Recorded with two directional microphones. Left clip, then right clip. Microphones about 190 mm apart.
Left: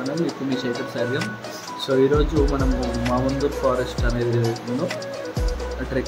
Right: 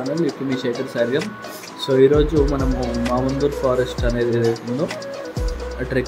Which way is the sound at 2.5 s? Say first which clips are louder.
Right 2 dB; centre (ahead or behind).